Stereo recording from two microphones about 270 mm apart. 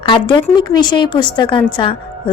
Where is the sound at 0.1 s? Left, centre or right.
Centre.